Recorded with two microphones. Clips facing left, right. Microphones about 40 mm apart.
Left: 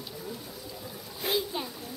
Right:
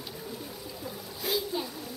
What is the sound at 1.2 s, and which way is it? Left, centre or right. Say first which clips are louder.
Splash: left 1 dB; left.